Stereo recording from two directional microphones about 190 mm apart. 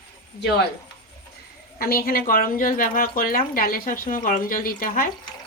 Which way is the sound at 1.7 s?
50° left (ahead or behind).